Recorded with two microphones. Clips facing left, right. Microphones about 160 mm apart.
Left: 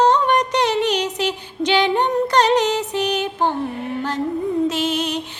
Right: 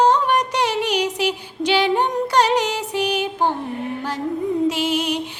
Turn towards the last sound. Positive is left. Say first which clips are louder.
# even
turn(degrees=-10)  # may be behind; listen again after turning